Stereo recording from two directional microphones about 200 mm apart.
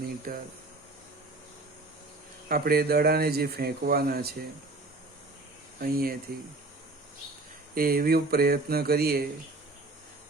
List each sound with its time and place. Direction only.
0.3 s speech: 50° right (ahead or behind)
2.5 s speech: 50° right (ahead or behind)
5.8 s speech: 50° right (ahead or behind)
7.8 s speech: 45° right (ahead or behind)